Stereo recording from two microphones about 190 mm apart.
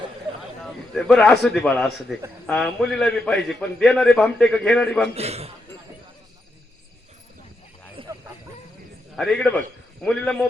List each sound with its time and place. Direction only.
0.6 s a man's voice: 5° left (ahead or behind)
5.1 s a man's voice: 35° right (ahead or behind)
8.0 s a sound: 30° right (ahead or behind)
9.1 s a man's voice: 5° left (ahead or behind)